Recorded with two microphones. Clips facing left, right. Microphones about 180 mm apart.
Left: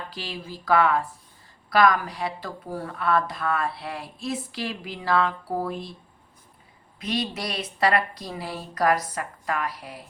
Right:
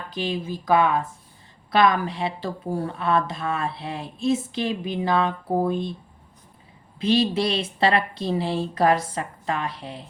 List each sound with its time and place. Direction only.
0.1 s speech: 20° right (ahead or behind)
7.0 s speech: 30° right (ahead or behind)